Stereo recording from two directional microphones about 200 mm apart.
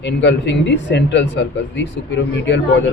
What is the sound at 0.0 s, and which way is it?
Speech, 60° left (ahead or behind).